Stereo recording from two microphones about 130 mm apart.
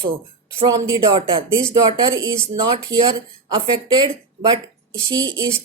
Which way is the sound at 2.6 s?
35° right (ahead or behind).